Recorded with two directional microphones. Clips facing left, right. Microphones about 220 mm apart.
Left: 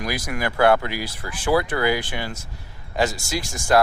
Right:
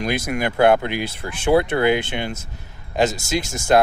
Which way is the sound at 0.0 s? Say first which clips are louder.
Right 4 dB; 25° right (ahead or behind).